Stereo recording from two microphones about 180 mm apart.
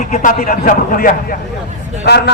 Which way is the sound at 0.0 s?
45° left (ahead or behind).